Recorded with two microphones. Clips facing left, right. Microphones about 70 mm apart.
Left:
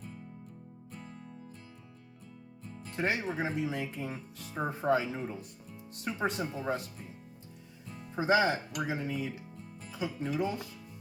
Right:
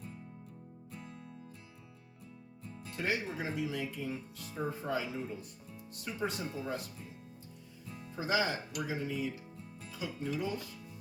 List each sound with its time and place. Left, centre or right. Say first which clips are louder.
2.9 s speech: left 3 dB; left
6.1 s speech: left 4 dB; left
6.5 s speech: left 4 dB; left
7.9 s music: left 1 dB; left
8.1 s speech: left 6 dB; left
9.8 s music: left 5 dB; left
10.2 s speech: left 3 dB; left